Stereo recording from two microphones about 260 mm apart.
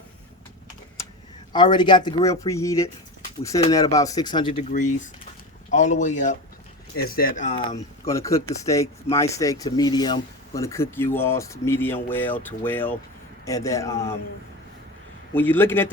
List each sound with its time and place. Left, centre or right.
1.5 s speech: centre
5.7 s speech: left
7.7 s speech: centre
15.4 s speech: centre